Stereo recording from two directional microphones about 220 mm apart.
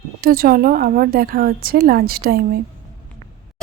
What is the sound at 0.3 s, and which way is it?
A woman's voice, 40° right (ahead or behind).